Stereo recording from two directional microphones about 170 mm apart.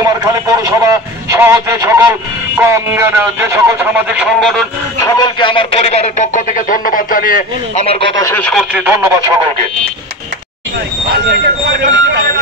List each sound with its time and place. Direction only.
0.0 s a man's voice: 20° right (ahead or behind); by 4.6 s centre (ahead or behind)
5.0 s speech: 25° left (ahead or behind); by 7.4 s 55° left (ahead or behind)
7.7 s speech: 35° left (ahead or behind)
8.2 s speech: 15° left (ahead or behind)
8.7 s a man's voice: 15° right (ahead or behind)
11.2 s speech: 75° right (ahead or behind)